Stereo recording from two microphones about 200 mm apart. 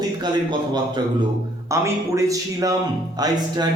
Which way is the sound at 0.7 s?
20° right (ahead or behind).